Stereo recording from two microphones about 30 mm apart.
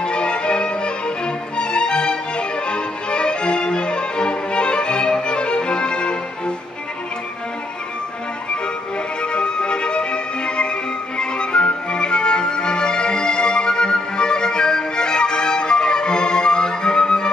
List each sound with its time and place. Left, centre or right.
0.0 s violin: left
9.2 s music: left